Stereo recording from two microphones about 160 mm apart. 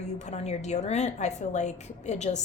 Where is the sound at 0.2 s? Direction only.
45° left (ahead or behind).